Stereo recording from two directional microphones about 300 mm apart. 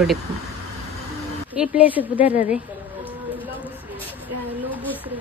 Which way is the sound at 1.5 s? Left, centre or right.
Centre.